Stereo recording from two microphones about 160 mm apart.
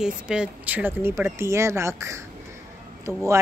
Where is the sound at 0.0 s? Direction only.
5° right (ahead or behind).